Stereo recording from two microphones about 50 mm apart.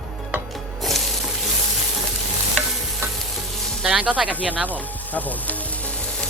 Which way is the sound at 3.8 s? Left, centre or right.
Right.